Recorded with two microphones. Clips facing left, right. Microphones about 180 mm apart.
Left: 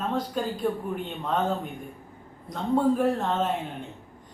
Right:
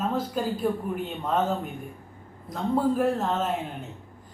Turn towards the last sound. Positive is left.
turn(degrees=0)  # may be behind; listen again after turning